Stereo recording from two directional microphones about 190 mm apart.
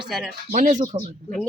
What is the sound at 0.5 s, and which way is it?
Speech, 40° right (ahead or behind).